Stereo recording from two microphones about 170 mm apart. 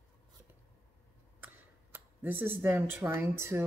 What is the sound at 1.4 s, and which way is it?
A woman's voice, 10° right (ahead or behind).